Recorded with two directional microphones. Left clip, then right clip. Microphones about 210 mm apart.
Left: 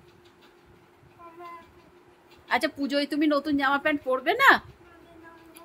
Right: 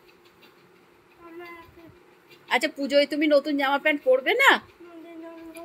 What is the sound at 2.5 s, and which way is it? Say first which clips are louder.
A woman's voice: right 3 dB; 15° left (ahead or behind).